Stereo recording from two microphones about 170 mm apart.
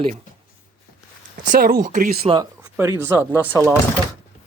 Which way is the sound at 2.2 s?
30° right (ahead or behind).